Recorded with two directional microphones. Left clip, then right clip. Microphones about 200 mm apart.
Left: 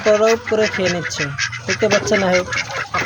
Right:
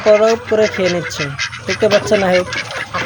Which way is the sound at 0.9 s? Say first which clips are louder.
Right 2 dB; 45° left (ahead or behind).